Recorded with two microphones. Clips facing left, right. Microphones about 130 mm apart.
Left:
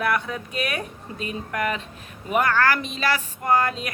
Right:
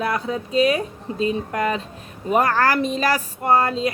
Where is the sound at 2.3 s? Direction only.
35° right (ahead or behind).